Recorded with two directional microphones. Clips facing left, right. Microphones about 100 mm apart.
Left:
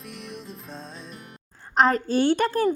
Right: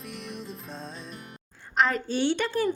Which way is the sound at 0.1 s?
Centre (ahead or behind).